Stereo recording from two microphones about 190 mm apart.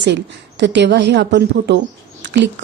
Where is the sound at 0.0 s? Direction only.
65° right (ahead or behind).